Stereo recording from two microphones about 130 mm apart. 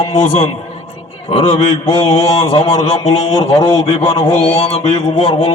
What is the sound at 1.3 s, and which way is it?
Speech, 50° left (ahead or behind).